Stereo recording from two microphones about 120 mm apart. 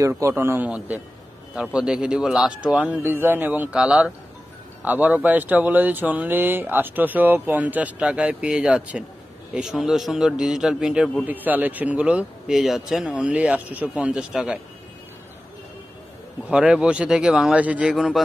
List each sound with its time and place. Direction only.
0.0 s a man's voice: 20° right (ahead or behind)
16.4 s a man's voice: 10° right (ahead or behind)